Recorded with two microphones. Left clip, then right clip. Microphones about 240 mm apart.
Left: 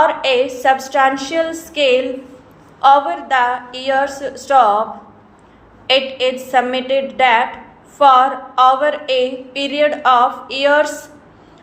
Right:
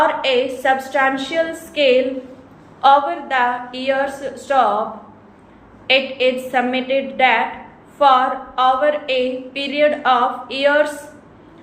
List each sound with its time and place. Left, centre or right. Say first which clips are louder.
0.0 s speech: left 2 dB; left
5.9 s speech: left 1 dB; left